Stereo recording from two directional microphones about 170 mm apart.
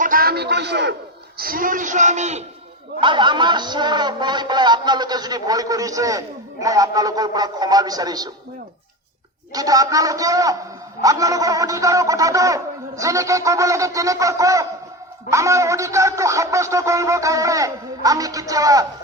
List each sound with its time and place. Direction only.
0.0 s a sound: 60° right (ahead or behind); by 0.9 s 85° right
1.4 s a man's voice: 55° right (ahead or behind)
3.0 s speech: 25° right (ahead or behind)
9.5 s speech: 20° right (ahead or behind)